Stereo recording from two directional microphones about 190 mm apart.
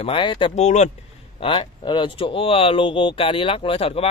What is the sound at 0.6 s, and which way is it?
Speech, 40° left (ahead or behind).